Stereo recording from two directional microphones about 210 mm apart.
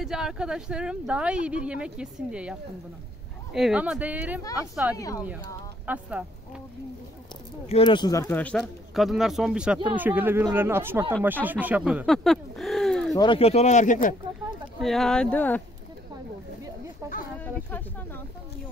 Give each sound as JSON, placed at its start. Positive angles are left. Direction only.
{"t": 0.0, "sound": "speech", "side_deg": -5}
{"t": 3.5, "sound": "speech", "side_deg": -5}
{"t": 4.9, "sound": "speech", "side_deg": 15}
{"t": 5.9, "sound": "speech", "side_deg": -5}
{"t": 7.6, "sound": "speech", "side_deg": 25}
{"t": 13.1, "sound": "speech", "side_deg": 20}
{"t": 14.8, "sound": "speech", "side_deg": 0}
{"t": 17.0, "sound": "speech", "side_deg": -10}
{"t": 17.4, "sound": "speech", "side_deg": 10}